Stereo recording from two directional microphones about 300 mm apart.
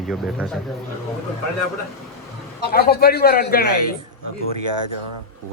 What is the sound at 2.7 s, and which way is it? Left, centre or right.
A man's voice, left.